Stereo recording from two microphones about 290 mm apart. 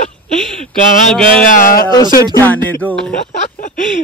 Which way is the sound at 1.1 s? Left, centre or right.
Centre.